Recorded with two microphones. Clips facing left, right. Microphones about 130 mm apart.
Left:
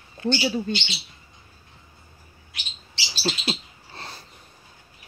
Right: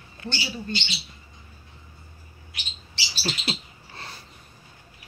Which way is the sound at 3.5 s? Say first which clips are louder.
Left 2 dB; 25° left (ahead or behind).